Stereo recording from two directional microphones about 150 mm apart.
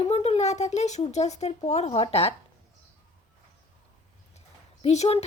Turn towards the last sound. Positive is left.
turn(degrees=45)  # may be behind; listen again after turning